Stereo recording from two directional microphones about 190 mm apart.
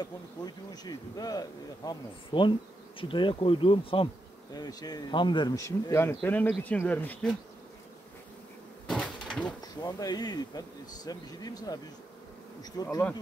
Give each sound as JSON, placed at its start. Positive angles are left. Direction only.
{"t": 0.0, "sound": "speech", "side_deg": 20}
{"t": 8.8, "sound": "bee", "side_deg": 0}
{"t": 9.6, "sound": "speech", "side_deg": 20}